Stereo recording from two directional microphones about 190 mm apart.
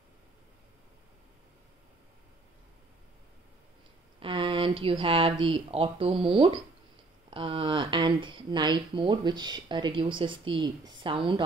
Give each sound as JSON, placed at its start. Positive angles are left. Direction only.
{"t": 4.2, "sound": "speech", "side_deg": -25}